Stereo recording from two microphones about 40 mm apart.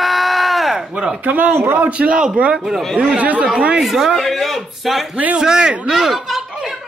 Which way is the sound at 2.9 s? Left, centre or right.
Right.